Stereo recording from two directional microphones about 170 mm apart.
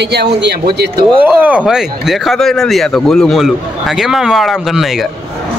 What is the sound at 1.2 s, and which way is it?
Speech, 10° right (ahead or behind).